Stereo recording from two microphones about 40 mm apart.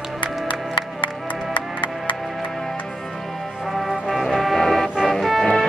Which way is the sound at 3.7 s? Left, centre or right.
Centre.